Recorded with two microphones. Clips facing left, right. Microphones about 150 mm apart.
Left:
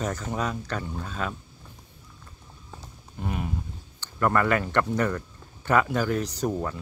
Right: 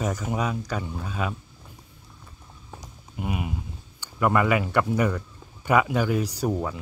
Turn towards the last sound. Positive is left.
turn(degrees=-10)  # may be behind; listen again after turning